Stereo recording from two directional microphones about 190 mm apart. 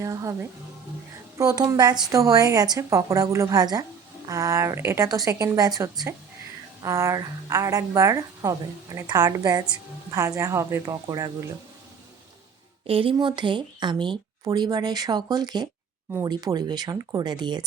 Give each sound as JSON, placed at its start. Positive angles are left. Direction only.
{"t": 0.0, "sound": "a woman's voice", "side_deg": -15}
{"t": 1.4, "sound": "a woman's voice", "side_deg": -20}
{"t": 12.9, "sound": "speech", "side_deg": -30}